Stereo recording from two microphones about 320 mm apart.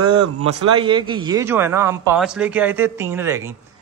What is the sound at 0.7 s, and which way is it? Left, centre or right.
Speech, centre.